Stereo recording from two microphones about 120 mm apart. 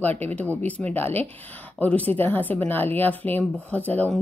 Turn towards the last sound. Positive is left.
turn(degrees=15)  # may be behind; listen again after turning